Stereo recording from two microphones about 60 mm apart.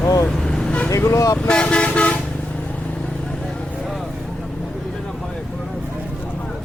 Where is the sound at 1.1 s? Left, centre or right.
Left.